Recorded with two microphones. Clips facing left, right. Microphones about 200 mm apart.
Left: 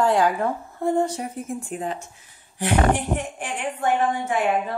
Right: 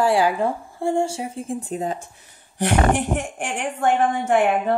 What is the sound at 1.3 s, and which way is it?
Speech, 35° right (ahead or behind).